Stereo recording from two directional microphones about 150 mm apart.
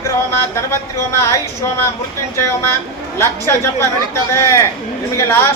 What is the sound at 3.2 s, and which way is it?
Speech, 15° left (ahead or behind).